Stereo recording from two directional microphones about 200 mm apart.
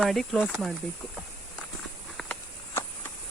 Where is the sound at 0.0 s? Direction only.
Centre (ahead or behind).